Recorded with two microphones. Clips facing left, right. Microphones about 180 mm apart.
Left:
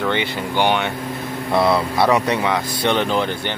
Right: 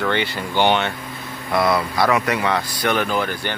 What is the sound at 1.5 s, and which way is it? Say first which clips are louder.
Speech: left 2 dB; 25° left (ahead or behind).